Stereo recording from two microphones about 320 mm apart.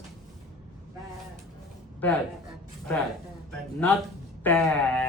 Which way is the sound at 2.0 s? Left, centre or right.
Centre.